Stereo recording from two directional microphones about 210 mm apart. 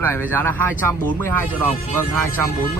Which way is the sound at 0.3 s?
10° left (ahead or behind).